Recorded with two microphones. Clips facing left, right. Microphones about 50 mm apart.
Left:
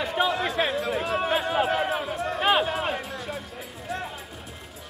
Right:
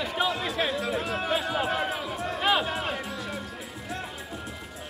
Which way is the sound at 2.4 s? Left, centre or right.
Left.